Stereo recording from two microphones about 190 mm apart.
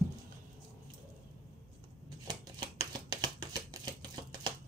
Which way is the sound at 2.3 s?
20° right (ahead or behind).